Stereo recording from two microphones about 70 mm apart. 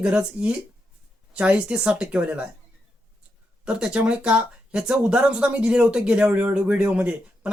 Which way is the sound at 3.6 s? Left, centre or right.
Centre.